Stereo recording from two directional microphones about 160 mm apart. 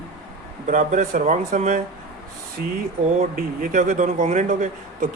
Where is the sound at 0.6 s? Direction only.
55° right (ahead or behind).